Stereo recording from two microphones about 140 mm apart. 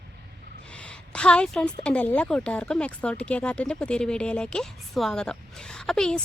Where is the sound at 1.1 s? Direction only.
5° left (ahead or behind).